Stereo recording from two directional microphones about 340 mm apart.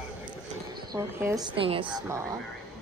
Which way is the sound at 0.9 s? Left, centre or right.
Centre.